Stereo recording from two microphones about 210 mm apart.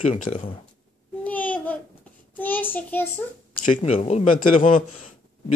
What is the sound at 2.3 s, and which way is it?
Child singing, 10° left (ahead or behind).